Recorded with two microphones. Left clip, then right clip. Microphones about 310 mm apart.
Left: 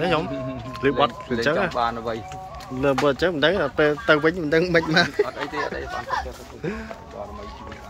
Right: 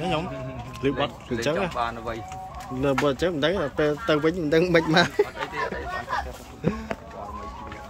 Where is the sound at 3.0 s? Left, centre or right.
Centre.